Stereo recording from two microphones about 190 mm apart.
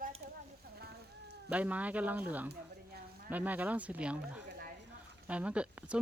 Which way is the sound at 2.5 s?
55° right (ahead or behind).